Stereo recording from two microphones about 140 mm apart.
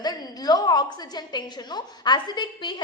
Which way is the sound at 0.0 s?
30° left (ahead or behind).